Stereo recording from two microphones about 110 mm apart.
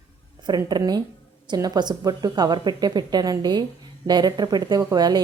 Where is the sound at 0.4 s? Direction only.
40° right (ahead or behind).